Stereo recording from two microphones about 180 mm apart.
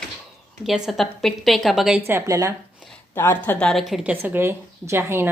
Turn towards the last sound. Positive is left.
turn(degrees=-15)  # may be behind; listen again after turning